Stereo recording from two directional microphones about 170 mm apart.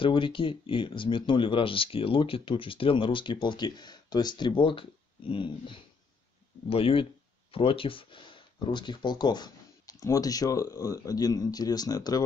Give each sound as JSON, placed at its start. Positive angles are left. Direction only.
{"t": 0.0, "sound": "speech", "side_deg": 30}